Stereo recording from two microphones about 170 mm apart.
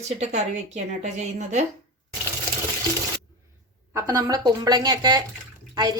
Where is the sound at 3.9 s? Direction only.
20° right (ahead or behind).